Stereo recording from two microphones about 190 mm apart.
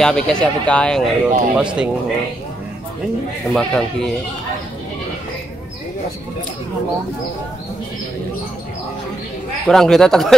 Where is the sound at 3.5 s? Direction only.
5° left (ahead or behind).